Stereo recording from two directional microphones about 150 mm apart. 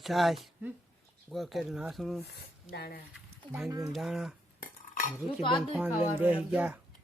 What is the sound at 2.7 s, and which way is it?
Speech, 90° left.